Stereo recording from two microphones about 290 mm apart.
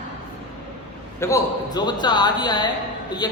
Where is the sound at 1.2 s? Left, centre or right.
Centre.